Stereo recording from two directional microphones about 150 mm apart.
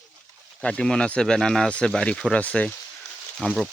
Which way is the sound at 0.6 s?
5° left (ahead or behind).